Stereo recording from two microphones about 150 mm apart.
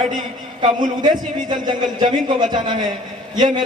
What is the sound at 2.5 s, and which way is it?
Speech, 30° right (ahead or behind).